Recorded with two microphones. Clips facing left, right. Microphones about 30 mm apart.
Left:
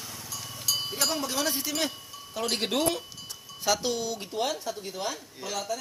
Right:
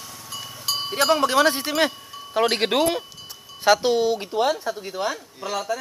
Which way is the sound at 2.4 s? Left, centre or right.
Right.